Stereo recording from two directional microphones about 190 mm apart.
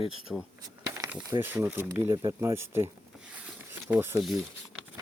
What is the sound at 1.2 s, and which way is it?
Speech, 15° right (ahead or behind).